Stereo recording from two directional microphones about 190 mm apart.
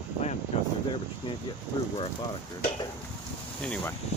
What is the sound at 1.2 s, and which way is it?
Speech, 25° left (ahead or behind).